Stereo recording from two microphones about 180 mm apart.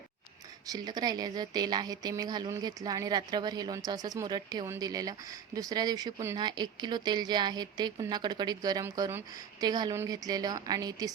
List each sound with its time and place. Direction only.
0.7 s speech: 20° right (ahead or behind)